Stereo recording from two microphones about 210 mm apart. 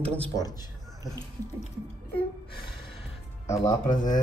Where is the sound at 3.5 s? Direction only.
15° left (ahead or behind).